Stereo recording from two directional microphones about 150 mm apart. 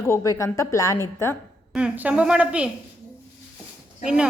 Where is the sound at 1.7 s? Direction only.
10° right (ahead or behind).